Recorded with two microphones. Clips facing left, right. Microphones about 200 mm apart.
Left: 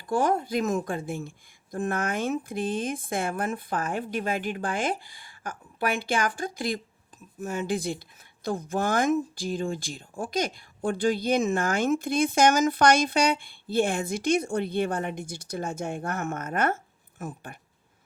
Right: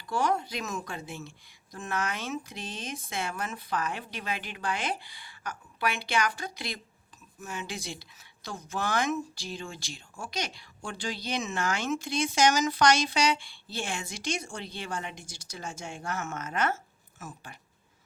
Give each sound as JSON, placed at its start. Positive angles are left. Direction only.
{"t": 0.0, "sound": "speech", "side_deg": 50}